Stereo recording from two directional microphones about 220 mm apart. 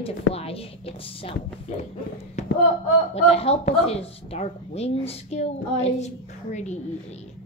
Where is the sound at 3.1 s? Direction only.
25° left (ahead or behind).